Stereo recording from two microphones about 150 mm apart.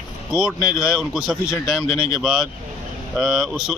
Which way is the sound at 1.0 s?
5° right (ahead or behind).